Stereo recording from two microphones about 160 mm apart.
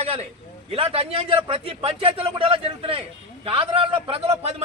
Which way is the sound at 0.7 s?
35° right (ahead or behind).